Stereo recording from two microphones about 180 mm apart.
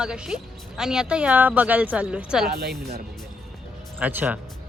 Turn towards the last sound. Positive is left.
turn(degrees=-10)  # may be behind; listen again after turning